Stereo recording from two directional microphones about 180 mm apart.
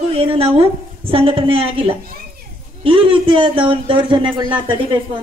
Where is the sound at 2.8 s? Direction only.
30° right (ahead or behind).